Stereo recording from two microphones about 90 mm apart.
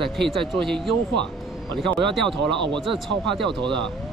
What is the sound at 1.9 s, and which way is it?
Speech, 65° right (ahead or behind).